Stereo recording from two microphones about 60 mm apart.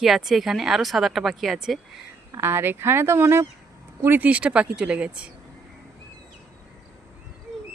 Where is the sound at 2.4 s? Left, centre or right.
Right.